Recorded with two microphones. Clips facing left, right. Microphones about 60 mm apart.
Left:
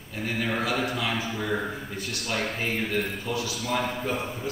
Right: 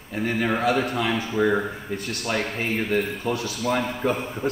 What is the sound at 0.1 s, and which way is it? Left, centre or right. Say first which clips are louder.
A man's voice: right 5 dB; right.